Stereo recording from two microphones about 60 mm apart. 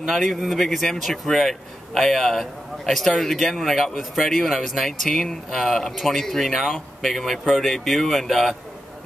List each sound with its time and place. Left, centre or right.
0.0 s a man's voice: centre